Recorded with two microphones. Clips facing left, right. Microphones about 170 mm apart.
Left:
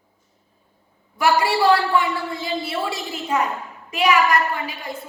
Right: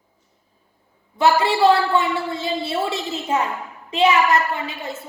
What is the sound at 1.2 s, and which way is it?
A woman's voice, 25° right (ahead or behind).